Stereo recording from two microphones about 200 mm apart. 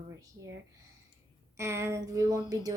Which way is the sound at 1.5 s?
15° right (ahead or behind).